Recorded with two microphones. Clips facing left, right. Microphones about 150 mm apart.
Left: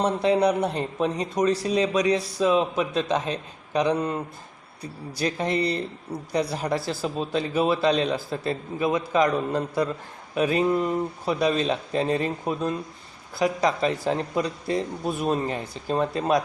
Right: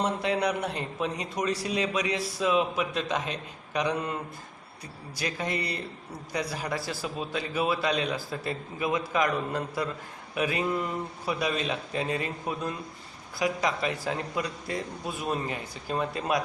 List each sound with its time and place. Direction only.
0.0 s a man's voice: 30° left (ahead or behind)
5.2 s a man's voice: 30° left (ahead or behind)